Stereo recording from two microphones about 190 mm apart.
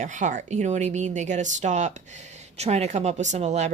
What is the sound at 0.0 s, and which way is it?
Speech, 40° right (ahead or behind).